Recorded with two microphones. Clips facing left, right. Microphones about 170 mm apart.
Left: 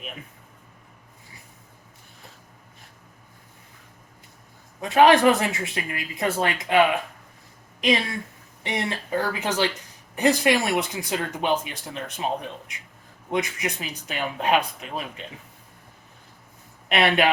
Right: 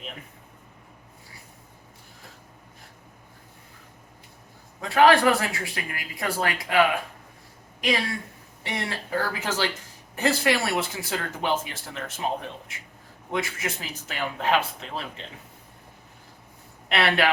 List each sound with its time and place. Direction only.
4.8 s a woman's voice: 20° left (ahead or behind)
16.9 s speech: 20° left (ahead or behind)